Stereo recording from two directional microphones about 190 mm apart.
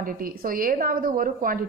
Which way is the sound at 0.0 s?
45° right (ahead or behind).